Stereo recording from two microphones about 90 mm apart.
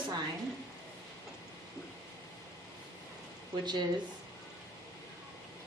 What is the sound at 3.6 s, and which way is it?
Speech, 55° right (ahead or behind).